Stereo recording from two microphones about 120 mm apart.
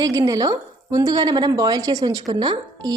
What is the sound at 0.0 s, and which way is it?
A woman's voice, 30° right (ahead or behind).